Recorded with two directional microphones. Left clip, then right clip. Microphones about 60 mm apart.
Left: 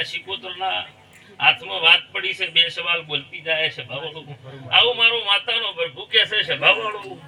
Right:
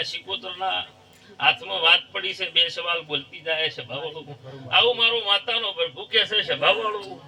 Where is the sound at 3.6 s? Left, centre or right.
Right.